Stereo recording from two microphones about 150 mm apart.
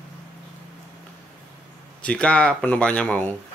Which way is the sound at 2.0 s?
10° left (ahead or behind).